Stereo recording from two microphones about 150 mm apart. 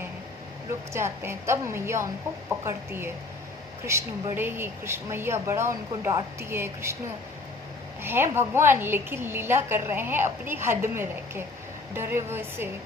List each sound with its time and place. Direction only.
0.9 s a woman's voice: 15° right (ahead or behind)
8.0 s a woman's voice: 15° right (ahead or behind)